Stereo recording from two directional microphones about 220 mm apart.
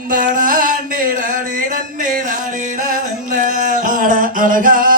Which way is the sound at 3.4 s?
35° right (ahead or behind).